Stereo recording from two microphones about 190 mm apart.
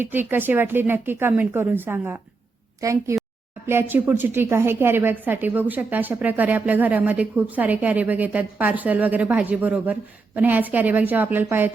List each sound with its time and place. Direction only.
0.0 s a woman's voice: 10° right (ahead or behind)